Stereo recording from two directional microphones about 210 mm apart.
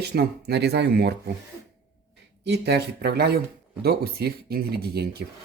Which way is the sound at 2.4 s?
55° right (ahead or behind).